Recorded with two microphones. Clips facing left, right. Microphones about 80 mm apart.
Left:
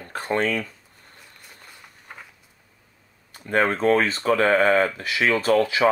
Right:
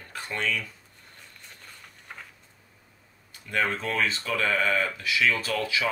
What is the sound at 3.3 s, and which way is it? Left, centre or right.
Speech, left.